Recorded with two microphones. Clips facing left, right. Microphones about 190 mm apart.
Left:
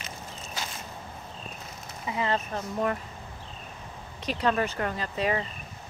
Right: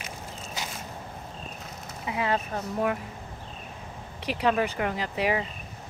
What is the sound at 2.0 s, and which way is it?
Speech, 10° right (ahead or behind).